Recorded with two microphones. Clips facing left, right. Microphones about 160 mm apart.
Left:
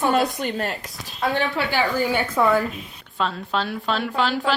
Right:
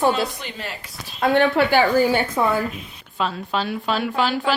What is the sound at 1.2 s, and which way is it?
Speech, 60° right (ahead or behind).